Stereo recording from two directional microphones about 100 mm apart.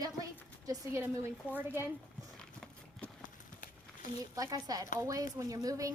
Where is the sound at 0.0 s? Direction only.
35° right (ahead or behind).